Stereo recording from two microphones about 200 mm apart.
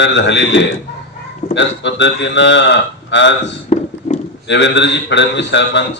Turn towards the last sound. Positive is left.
turn(degrees=60)  # may be behind; listen again after turning